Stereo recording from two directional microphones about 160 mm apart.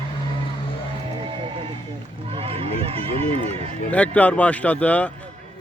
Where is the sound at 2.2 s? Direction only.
35° right (ahead or behind).